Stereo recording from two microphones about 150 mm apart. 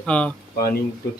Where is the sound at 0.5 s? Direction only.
85° left.